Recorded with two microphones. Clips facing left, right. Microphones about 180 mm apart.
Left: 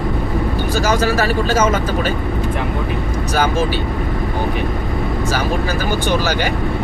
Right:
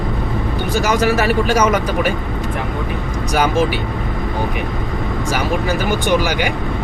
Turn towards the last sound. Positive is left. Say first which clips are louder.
# right 1 dB
turn(degrees=-15)  # may be behind; listen again after turning